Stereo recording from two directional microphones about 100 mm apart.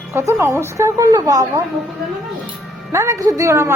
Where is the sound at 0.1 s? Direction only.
30° right (ahead or behind).